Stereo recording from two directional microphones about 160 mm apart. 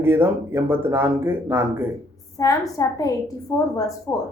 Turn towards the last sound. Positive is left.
turn(degrees=20)  # may be behind; listen again after turning